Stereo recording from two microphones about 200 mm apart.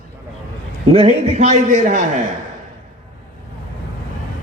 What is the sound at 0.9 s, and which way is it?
A man's voice, 35° right (ahead or behind).